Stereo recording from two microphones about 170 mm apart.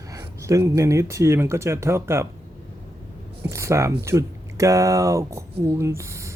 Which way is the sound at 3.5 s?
15° right (ahead or behind).